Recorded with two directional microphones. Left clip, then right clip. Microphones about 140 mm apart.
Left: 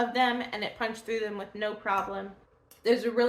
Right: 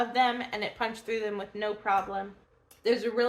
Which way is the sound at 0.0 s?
25° right (ahead or behind).